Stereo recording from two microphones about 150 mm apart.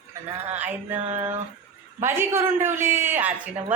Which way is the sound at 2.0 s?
15° right (ahead or behind).